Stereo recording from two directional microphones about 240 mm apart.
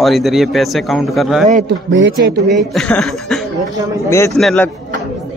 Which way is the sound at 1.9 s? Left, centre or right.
Right.